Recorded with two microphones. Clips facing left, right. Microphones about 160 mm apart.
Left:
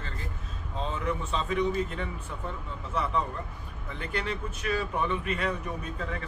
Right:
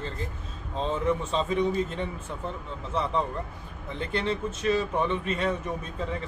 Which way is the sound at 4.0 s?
25° right (ahead or behind).